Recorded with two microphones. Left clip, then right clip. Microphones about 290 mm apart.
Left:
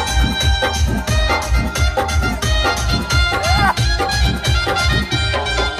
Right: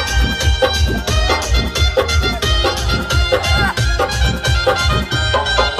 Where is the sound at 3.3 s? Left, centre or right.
Centre.